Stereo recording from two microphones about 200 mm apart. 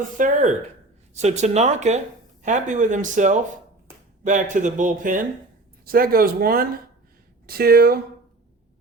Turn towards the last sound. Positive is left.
turn(degrees=-50)  # may be behind; listen again after turning